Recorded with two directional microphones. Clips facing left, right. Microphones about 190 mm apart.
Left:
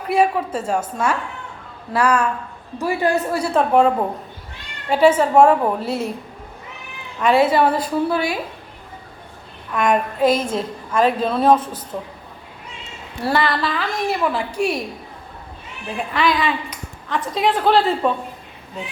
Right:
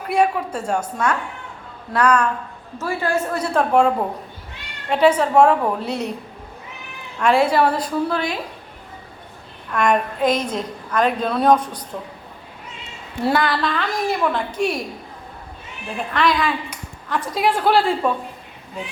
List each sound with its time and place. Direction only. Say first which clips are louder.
0.1 s a woman's voice: left 1 dB; 5° left (ahead or behind)
3.3 s a woman's voice: even; 5° left (ahead or behind)
7.2 s a woman's voice: left 1 dB; centre (ahead or behind)
9.7 s a woman's voice: even; centre (ahead or behind)
13.3 s a woman's voice: left 1 dB; centre (ahead or behind)
16.0 s a woman's voice: even; centre (ahead or behind)